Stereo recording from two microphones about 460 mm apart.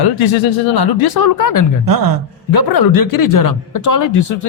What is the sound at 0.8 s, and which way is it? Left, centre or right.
Speech, left.